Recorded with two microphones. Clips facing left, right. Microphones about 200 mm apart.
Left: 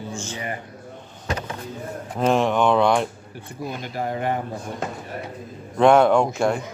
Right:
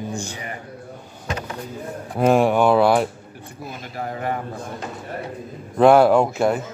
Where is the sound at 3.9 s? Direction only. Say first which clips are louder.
Left 1 dB; 30° left (ahead or behind).